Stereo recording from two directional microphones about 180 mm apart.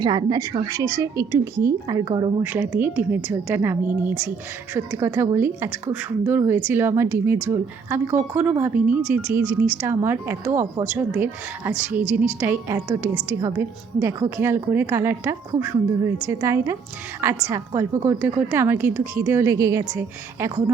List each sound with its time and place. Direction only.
0.0 s a woman's voice: 20° right (ahead or behind)
2.4 s a woman's voice: 10° right (ahead or behind)